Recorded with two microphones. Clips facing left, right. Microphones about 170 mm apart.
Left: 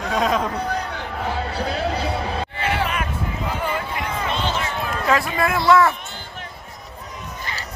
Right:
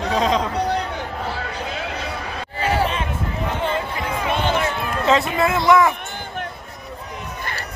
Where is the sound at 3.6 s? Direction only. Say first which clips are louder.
Right 3 dB; 25° right (ahead or behind).